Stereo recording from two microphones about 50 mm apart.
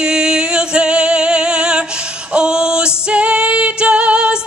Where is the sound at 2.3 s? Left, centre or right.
Centre.